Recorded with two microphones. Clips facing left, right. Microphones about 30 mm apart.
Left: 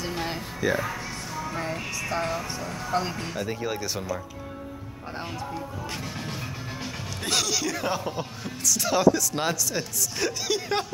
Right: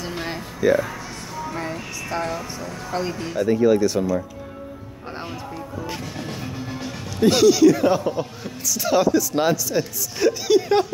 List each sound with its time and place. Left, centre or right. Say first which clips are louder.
0.0 s music: right 2 dB; centre
2.3 s a man's voice: right 1 dB; centre
5.8 s music: right 4 dB; centre
7.2 s a man's voice: right 13 dB; centre